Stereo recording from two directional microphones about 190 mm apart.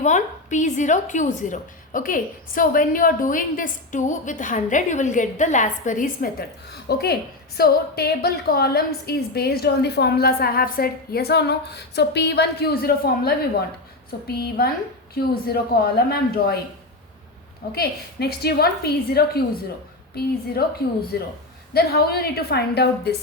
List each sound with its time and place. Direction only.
0.0 s a woman's voice: 40° left (ahead or behind)
6.8 s a woman's voice: 55° left (ahead or behind)
17.7 s a woman's voice: 55° left (ahead or behind)
21.1 s a woman's voice: 55° left (ahead or behind)